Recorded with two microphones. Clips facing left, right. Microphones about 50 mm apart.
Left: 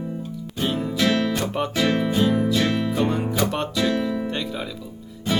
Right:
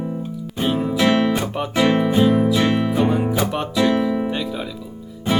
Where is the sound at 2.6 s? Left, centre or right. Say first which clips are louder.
Right 4 dB; right.